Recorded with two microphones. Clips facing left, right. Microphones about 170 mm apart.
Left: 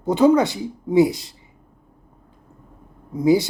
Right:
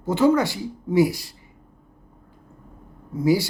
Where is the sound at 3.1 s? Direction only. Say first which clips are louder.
Left 3 dB; 20° left (ahead or behind).